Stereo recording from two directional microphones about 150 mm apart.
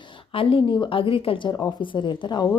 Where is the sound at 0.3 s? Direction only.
35° left (ahead or behind).